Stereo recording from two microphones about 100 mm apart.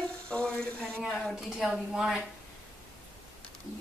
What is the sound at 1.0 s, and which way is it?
A woman's voice, centre (ahead or behind).